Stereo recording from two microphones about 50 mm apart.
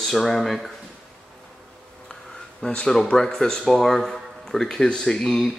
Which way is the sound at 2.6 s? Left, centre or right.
Centre.